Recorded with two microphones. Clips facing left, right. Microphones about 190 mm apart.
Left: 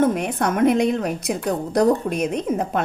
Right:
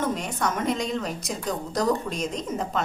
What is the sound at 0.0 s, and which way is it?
A woman's voice, 60° left (ahead or behind).